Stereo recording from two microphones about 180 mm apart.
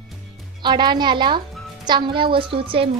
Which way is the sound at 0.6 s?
25° right (ahead or behind).